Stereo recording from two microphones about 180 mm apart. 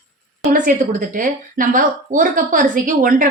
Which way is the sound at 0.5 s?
45° right (ahead or behind).